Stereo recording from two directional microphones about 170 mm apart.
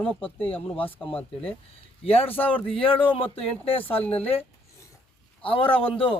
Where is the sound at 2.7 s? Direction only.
30° left (ahead or behind).